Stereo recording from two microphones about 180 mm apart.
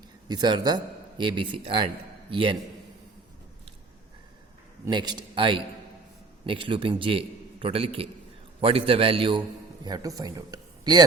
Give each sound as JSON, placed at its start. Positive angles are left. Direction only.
{"t": 0.3, "sound": "a man's voice", "side_deg": -25}
{"t": 4.9, "sound": "a man's voice", "side_deg": -25}